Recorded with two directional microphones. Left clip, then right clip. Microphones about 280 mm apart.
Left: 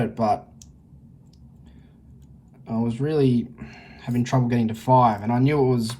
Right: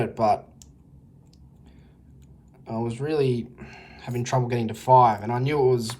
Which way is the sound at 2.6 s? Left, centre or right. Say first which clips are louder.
Left 2 dB; centre.